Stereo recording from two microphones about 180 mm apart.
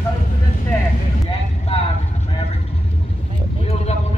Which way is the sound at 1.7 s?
35° left (ahead or behind).